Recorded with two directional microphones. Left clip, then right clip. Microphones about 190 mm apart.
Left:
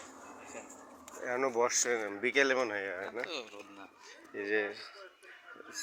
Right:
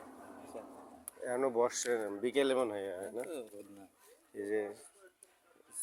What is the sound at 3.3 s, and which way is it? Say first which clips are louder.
Speech: left 3 dB; 60° right (ahead or behind).